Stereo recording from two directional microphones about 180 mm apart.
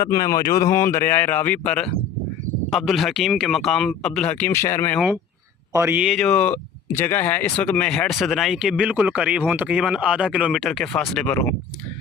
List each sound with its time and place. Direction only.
0.0 s a man's voice: 20° left (ahead or behind)
5.7 s speech: 10° right (ahead or behind); by 11.5 s 5° left (ahead or behind)